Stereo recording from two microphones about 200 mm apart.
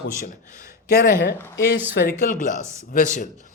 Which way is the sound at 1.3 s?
10° left (ahead or behind).